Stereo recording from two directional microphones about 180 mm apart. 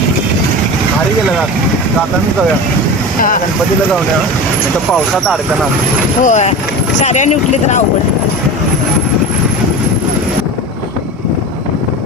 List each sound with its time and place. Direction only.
3.2 s speech: 50° left (ahead or behind)
6.2 s speech: 40° left (ahead or behind)